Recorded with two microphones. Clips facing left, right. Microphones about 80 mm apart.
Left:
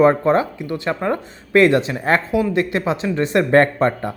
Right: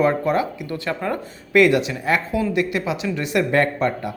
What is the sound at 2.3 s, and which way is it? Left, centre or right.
Speech, left.